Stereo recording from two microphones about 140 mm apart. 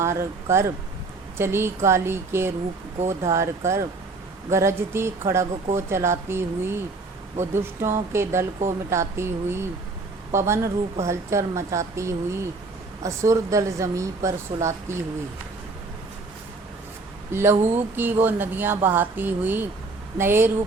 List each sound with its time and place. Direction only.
0.0 s speech: 20° right (ahead or behind)
17.3 s speech: 15° right (ahead or behind)